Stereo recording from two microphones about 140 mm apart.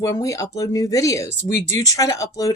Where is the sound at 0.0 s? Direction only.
25° left (ahead or behind).